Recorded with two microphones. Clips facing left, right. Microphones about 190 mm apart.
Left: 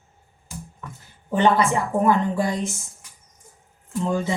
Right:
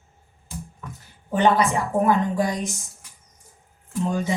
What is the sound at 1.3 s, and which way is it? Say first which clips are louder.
Speech: even; 15° right (ahead or behind).